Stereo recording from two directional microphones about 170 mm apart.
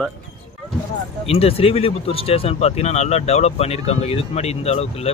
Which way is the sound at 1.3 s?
35° left (ahead or behind).